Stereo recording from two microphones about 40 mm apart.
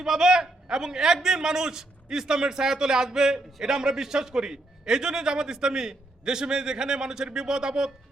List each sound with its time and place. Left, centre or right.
0.0 s a man's voice: centre